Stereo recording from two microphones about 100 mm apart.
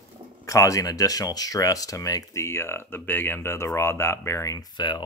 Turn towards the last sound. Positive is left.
turn(degrees=45)  # may be behind; listen again after turning